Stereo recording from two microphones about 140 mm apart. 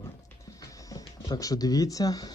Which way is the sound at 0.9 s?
25° left (ahead or behind).